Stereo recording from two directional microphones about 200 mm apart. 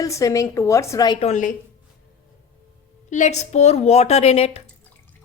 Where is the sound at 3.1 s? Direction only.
35° left (ahead or behind).